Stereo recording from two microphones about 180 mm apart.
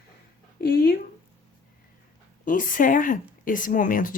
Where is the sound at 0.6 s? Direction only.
60° left (ahead or behind).